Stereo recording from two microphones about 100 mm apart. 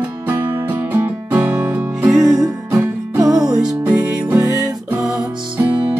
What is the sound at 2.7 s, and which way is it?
Music, 30° right (ahead or behind).